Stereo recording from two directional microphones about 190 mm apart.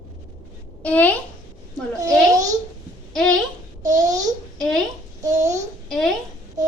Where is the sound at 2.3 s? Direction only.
20° right (ahead or behind).